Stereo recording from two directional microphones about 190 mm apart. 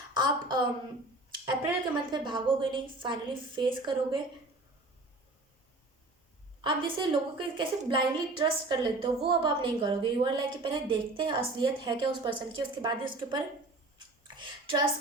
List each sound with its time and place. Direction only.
0.1 s a woman's voice: 20° right (ahead or behind)
6.6 s a woman's voice: 25° right (ahead or behind)
14.3 s a sound: 25° right (ahead or behind)